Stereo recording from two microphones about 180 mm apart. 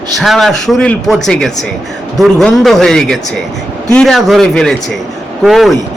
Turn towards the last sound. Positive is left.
turn(degrees=0)  # may be behind; listen again after turning